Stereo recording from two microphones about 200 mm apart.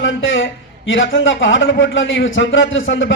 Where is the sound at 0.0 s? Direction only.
70° left (ahead or behind).